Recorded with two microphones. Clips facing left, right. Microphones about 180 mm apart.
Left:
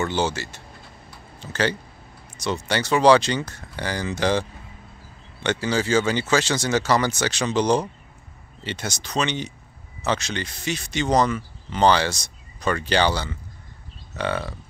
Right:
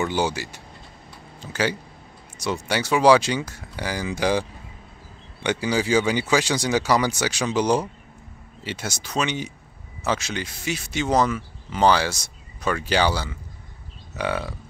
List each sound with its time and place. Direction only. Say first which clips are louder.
0.0 s speech: even; 15° right (ahead or behind)